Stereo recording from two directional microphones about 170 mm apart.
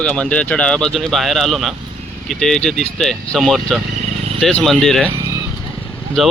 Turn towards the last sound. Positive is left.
turn(degrees=0)  # may be behind; listen again after turning